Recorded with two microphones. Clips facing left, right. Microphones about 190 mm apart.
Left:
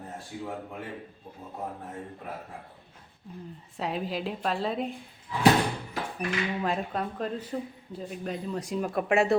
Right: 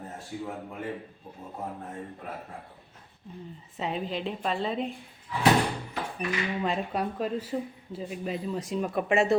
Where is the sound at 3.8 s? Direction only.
Centre (ahead or behind).